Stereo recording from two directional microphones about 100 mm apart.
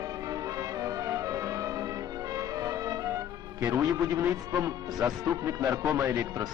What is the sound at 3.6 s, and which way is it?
A man's voice, 35° right (ahead or behind).